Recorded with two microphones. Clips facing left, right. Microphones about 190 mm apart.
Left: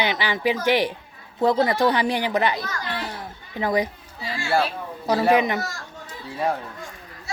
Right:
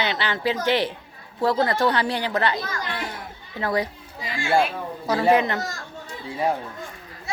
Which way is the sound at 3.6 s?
15° left (ahead or behind).